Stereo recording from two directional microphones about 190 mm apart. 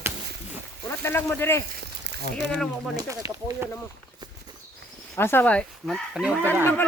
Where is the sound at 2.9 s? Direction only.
15° right (ahead or behind).